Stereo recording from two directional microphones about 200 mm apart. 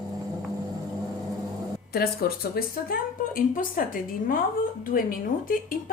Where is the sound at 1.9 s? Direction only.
50° left (ahead or behind).